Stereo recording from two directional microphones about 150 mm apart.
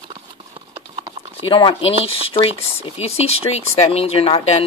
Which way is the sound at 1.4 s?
35° left (ahead or behind).